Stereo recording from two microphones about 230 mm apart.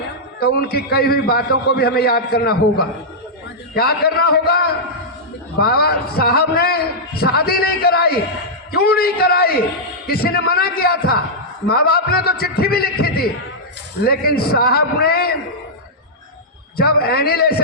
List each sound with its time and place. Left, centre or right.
0.3 s a man's voice: left
16.7 s a man's voice: left